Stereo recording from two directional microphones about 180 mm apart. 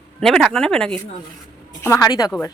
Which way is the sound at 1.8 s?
15° left (ahead or behind).